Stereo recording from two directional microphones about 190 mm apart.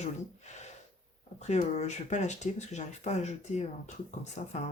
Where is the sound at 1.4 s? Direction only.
35° left (ahead or behind).